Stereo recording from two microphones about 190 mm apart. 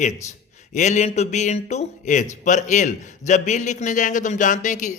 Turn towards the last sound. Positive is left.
turn(degrees=40)  # may be behind; listen again after turning